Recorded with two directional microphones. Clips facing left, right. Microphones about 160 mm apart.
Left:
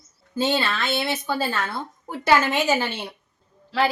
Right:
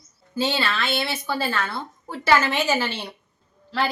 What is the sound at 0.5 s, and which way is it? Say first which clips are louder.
A woman's voice: left 1 dB; 20° left (ahead or behind).